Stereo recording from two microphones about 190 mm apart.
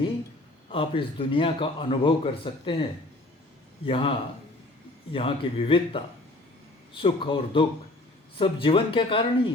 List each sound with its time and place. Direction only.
0.7 s a man's voice: 30° left (ahead or behind)
3.8 s a man's voice: 30° left (ahead or behind)
5.1 s a man's voice: 30° left (ahead or behind)